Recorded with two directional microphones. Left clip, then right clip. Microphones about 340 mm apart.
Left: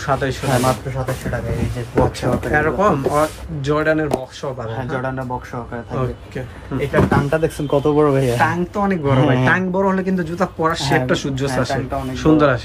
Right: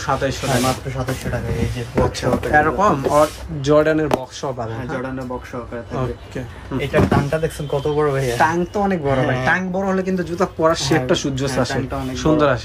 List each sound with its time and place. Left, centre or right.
0.0 s speech: centre
2.0 s speech: centre
6.9 s speech: centre
7.2 s speech: centre
8.4 s speech: centre